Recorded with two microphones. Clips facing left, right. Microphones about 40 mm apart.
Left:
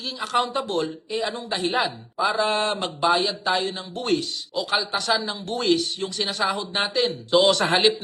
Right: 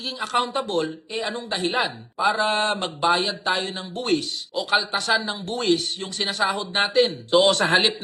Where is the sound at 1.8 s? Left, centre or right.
Right.